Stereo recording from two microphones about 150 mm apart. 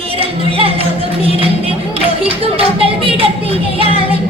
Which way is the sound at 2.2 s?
40° right (ahead or behind).